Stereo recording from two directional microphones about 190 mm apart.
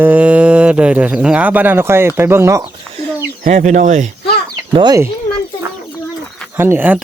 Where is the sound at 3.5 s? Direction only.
40° right (ahead or behind).